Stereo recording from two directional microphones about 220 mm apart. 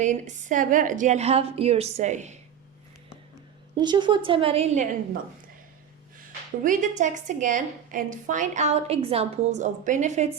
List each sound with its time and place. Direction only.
0.0 s a woman's voice: 35° right (ahead or behind)
3.8 s a woman's voice: 20° right (ahead or behind)
6.6 s a woman's voice: 35° right (ahead or behind)